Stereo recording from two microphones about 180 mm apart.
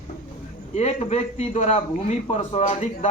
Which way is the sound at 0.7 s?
40° left (ahead or behind).